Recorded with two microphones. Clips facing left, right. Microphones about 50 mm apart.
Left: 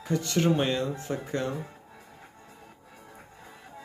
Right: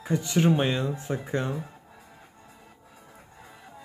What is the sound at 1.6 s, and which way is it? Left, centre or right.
Music, centre.